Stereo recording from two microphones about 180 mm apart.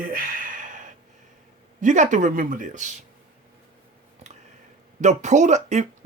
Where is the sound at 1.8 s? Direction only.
45° right (ahead or behind).